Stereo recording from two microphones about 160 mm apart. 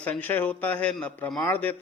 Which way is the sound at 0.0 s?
10° left (ahead or behind).